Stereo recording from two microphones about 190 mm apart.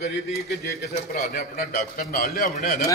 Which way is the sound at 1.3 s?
50° left (ahead or behind).